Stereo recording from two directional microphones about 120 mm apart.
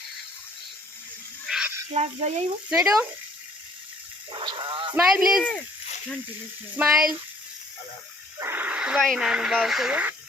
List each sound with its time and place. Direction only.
1.5 s snake: 5° right (ahead or behind)
1.9 s speech: 65° right (ahead or behind)
2.6 s speech: 5° right (ahead or behind)
4.3 s speech: 40° right (ahead or behind)
5.0 s speech: 5° right (ahead or behind)
5.4 s speech: 10° left (ahead or behind)
6.8 s speech: 15° right (ahead or behind)
8.4 s a sound: 15° right (ahead or behind)
9.0 s speech: centre (ahead or behind)